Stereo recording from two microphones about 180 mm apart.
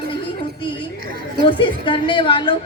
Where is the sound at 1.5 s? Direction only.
30° left (ahead or behind).